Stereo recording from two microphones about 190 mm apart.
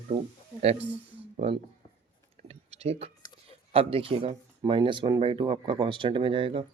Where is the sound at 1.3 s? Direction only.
35° right (ahead or behind).